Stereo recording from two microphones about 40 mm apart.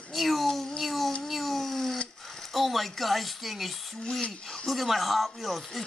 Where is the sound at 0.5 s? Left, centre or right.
Centre.